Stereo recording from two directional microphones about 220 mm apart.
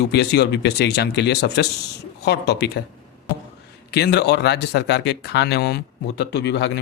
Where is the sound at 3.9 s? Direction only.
50° left (ahead or behind).